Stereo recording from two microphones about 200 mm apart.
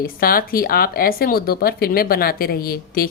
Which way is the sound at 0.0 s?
45° left (ahead or behind).